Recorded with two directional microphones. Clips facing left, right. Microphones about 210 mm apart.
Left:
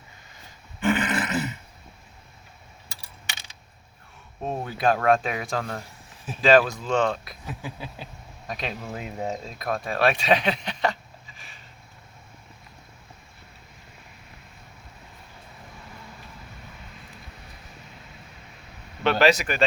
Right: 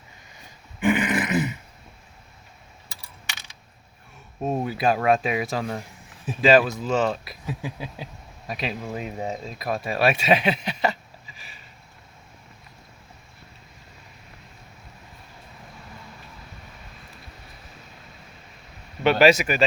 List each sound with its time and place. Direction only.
0.8 s a sound: 15° right (ahead or behind)
4.4 s speech: 10° right (ahead or behind)
7.6 s speech: 15° right (ahead or behind)
8.4 s speech: 5° right (ahead or behind)
19.0 s speech: 10° right (ahead or behind)